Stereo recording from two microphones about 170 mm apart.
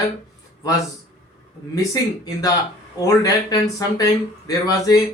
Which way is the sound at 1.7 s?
20° left (ahead or behind).